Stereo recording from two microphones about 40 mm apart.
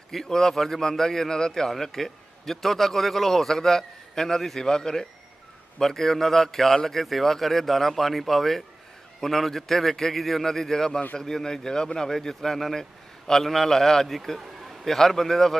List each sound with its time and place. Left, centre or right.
0.1 s a man's voice: centre